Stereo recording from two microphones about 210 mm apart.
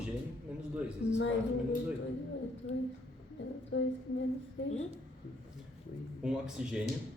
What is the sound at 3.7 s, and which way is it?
Speech, 60° left (ahead or behind).